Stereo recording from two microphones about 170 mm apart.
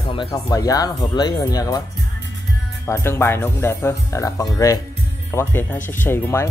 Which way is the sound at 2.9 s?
15° left (ahead or behind).